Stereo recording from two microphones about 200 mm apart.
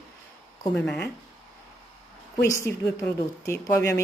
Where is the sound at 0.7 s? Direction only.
5° left (ahead or behind).